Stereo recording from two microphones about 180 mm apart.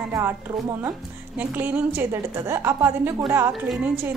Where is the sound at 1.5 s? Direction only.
10° right (ahead or behind).